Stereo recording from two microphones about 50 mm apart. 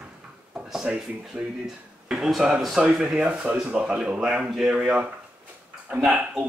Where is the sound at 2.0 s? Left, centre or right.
Centre.